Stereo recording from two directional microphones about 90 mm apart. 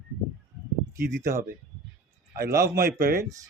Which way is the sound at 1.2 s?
35° right (ahead or behind).